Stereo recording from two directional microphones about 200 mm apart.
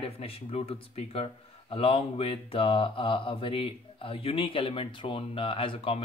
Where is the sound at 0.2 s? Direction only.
30° left (ahead or behind).